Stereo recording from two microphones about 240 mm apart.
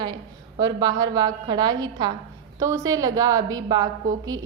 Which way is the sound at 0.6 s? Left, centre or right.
Centre.